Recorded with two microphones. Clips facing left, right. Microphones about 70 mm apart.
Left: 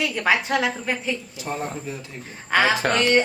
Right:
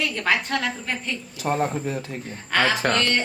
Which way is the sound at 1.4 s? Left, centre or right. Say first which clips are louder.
Right 7 dB; right.